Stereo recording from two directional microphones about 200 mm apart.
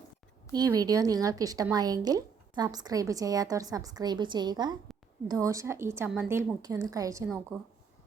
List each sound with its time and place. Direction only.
0.5 s a woman's voice: 20° right (ahead or behind)